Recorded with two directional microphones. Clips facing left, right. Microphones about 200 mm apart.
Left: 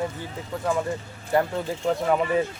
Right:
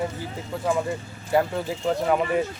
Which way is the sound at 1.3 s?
5° right (ahead or behind).